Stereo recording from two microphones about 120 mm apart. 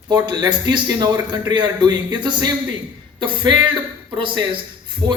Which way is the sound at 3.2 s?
40° right (ahead or behind).